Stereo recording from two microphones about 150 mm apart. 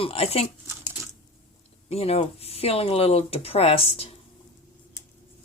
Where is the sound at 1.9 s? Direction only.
40° left (ahead or behind).